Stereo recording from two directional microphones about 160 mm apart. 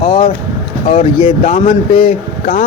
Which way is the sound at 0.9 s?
40° left (ahead or behind).